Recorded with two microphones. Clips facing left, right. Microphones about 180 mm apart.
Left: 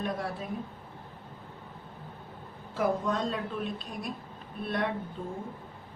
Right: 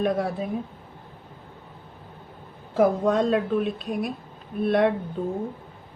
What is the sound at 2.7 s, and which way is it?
Speech, 65° right (ahead or behind).